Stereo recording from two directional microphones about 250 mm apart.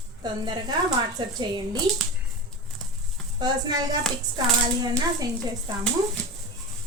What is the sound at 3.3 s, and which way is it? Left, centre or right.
A woman's voice, centre.